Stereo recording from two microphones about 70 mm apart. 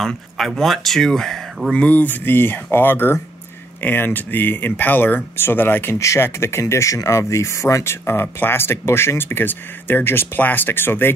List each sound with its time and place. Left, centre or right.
0.0 s speech: centre
1.7 s speech: centre
5.9 s speech: left